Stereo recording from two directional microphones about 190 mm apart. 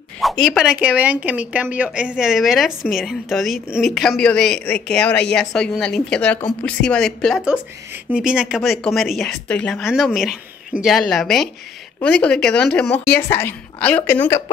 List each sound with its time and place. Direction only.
0.2 s a woman's voice: centre (ahead or behind)